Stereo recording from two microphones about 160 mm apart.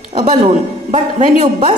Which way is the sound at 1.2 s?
45° right (ahead or behind).